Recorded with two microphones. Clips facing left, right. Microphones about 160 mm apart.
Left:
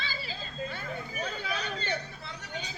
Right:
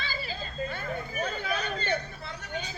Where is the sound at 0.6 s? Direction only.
50° right (ahead or behind).